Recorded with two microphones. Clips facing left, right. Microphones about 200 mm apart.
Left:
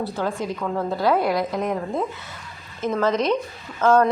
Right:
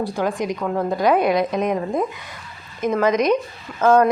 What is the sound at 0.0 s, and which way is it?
Speech, 15° right (ahead or behind).